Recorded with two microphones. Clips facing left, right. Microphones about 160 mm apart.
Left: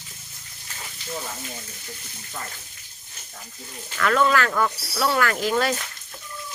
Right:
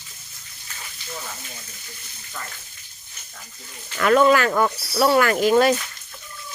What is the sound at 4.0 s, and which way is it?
Speech, 15° right (ahead or behind).